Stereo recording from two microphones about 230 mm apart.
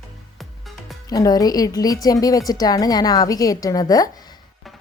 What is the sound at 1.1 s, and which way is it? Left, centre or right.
A woman's voice, centre.